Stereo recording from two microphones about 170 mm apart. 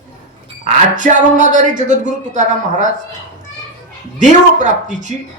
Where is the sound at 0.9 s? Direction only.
45° right (ahead or behind).